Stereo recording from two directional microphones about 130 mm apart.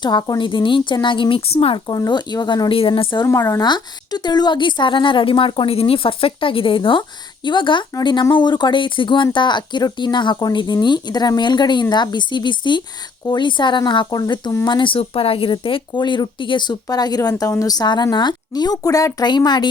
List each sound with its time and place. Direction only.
0.0 s speech: 30° left (ahead or behind)
1.9 s speech: 30° left (ahead or behind)
3.2 s speech: 20° left (ahead or behind)
3.7 s speech: 35° left (ahead or behind)